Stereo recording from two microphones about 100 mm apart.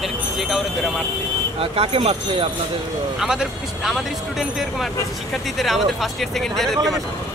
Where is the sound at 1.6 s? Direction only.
65° right (ahead or behind).